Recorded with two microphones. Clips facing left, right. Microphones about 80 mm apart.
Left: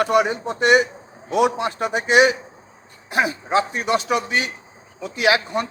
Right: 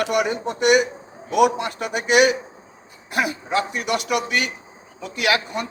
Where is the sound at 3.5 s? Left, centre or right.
Left.